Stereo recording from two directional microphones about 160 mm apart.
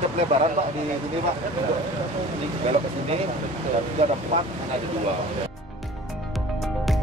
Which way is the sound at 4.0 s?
40° right (ahead or behind).